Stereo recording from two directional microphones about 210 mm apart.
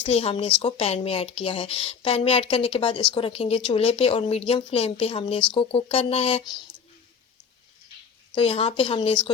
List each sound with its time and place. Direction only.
0.0 s speech: 30° left (ahead or behind)
8.4 s speech: 30° left (ahead or behind)